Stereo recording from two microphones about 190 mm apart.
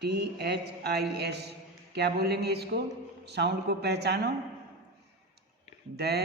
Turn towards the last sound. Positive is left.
turn(degrees=-60)  # may be behind; listen again after turning